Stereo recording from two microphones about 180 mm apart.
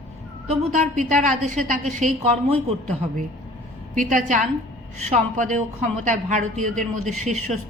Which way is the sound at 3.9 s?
45° right (ahead or behind).